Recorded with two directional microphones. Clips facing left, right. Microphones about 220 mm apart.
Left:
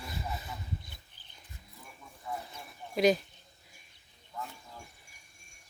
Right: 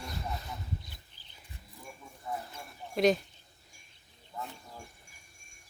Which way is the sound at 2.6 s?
Centre (ahead or behind).